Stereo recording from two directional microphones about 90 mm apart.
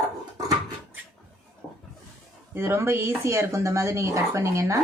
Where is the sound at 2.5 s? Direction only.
25° right (ahead or behind).